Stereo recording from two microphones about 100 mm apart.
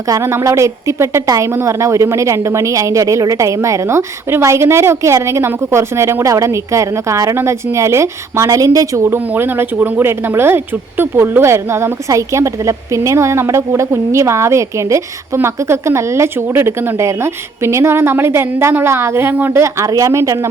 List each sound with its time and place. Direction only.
0.1 s speech: 25° right (ahead or behind)
9.0 s speech: 20° right (ahead or behind)